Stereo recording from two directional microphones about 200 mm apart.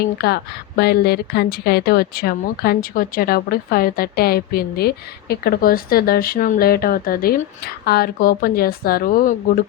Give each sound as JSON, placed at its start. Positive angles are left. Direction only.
{"t": 0.2, "sound": "speech", "side_deg": 50}